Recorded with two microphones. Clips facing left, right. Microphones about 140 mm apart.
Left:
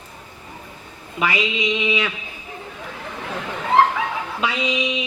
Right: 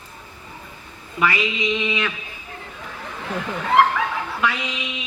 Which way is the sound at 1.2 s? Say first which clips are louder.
Right 1 dB; 20° left (ahead or behind).